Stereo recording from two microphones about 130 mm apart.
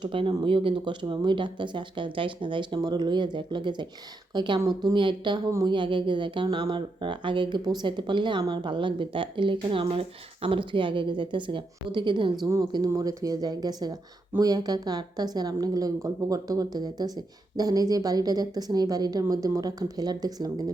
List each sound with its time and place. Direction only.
0.0 s speech: 40° right (ahead or behind)
5.5 s a woman's voice: 25° right (ahead or behind)
5.7 s a woman's voice: 40° right (ahead or behind)